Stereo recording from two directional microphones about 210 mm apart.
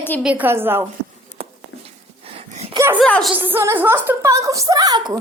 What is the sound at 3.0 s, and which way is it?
Speech, centre (ahead or behind).